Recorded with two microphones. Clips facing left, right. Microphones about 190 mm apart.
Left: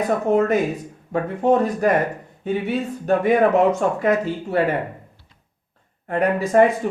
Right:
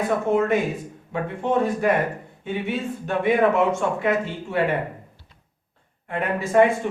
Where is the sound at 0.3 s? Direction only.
35° left (ahead or behind).